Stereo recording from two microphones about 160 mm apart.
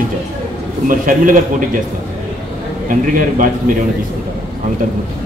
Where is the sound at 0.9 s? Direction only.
60° right (ahead or behind).